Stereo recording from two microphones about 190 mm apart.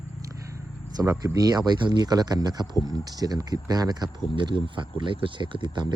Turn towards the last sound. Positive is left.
turn(degrees=-25)  # may be behind; listen again after turning